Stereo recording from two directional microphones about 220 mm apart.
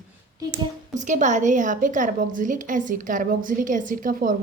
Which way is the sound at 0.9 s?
35° right (ahead or behind).